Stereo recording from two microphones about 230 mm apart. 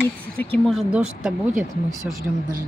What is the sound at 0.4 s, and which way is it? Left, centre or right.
Speech, centre.